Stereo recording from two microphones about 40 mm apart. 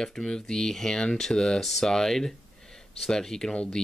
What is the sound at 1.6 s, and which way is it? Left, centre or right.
Speech, centre.